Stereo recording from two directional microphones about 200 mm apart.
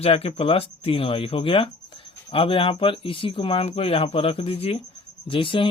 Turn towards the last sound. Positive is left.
turn(degrees=25)  # may be behind; listen again after turning